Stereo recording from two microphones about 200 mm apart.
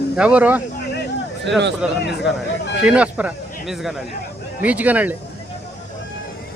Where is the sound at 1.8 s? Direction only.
5° right (ahead or behind).